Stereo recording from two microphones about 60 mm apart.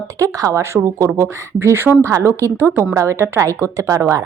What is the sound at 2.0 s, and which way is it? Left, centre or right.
Speech, right.